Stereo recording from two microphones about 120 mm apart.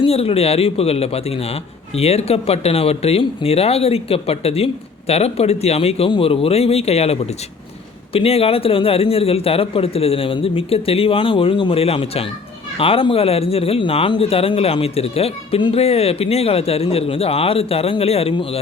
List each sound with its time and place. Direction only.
0.0 s a man's voice: 55° left (ahead or behind)